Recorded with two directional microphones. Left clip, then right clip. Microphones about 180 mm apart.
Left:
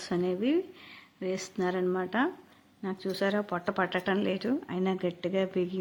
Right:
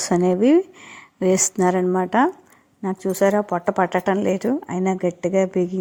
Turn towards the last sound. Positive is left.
turn(degrees=-25)  # may be behind; listen again after turning